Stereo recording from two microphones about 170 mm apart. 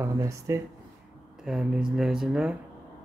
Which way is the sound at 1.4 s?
5° right (ahead or behind).